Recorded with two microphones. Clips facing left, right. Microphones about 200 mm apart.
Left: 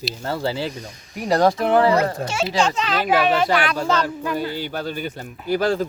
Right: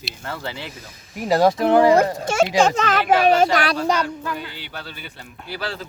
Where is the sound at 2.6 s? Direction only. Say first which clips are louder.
Right 2 dB; 45° right (ahead or behind).